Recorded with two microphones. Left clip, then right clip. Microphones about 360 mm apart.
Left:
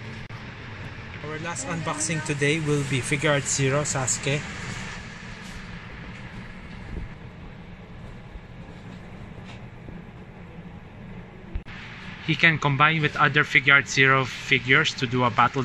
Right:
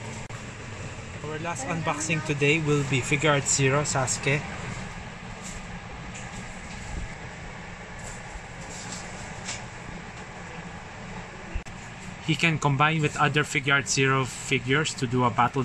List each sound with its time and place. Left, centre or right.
1.3 s speech: centre
12.3 s speech: centre